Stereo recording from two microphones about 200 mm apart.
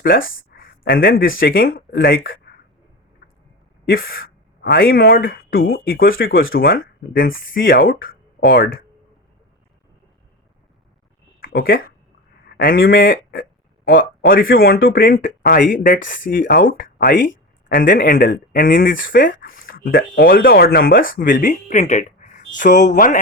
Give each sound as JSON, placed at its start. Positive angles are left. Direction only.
{"t": 0.3, "sound": "speech", "side_deg": 45}
{"t": 3.8, "sound": "speech", "side_deg": 45}
{"t": 11.3, "sound": "a sound", "side_deg": 45}
{"t": 12.5, "sound": "speech", "side_deg": 45}